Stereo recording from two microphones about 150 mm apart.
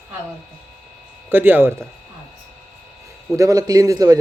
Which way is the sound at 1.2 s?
15° right (ahead or behind).